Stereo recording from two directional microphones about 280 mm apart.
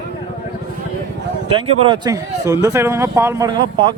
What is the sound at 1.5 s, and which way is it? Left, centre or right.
Speech, centre.